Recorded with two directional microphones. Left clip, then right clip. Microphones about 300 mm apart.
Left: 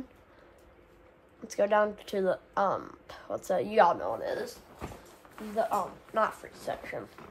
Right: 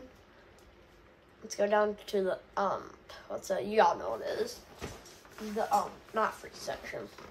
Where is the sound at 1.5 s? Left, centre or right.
Left.